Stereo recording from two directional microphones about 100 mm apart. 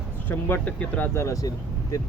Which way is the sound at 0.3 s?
20° left (ahead or behind).